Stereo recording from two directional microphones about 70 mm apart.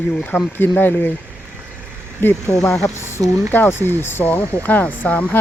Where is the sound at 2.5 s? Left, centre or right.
Centre.